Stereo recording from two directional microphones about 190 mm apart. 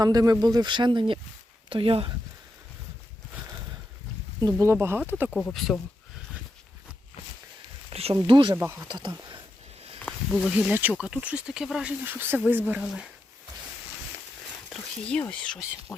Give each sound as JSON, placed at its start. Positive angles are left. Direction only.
{"t": 0.0, "sound": "speech", "side_deg": -20}
{"t": 4.4, "sound": "speech", "side_deg": -20}
{"t": 5.3, "sound": "speech", "side_deg": 5}
{"t": 7.9, "sound": "a sound", "side_deg": -30}
{"t": 8.1, "sound": "speech", "side_deg": -25}
{"t": 8.5, "sound": "speech", "side_deg": -15}
{"t": 10.0, "sound": "snake", "side_deg": 10}
{"t": 10.4, "sound": "speech", "side_deg": -5}
{"t": 14.7, "sound": "speech", "side_deg": 5}